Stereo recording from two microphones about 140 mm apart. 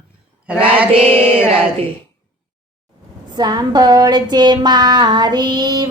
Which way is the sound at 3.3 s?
30° right (ahead or behind).